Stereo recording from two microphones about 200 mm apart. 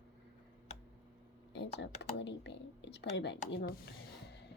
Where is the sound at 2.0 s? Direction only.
60° left (ahead or behind).